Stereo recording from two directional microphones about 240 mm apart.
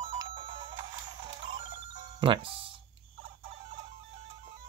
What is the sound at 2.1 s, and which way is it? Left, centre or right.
Speech, right.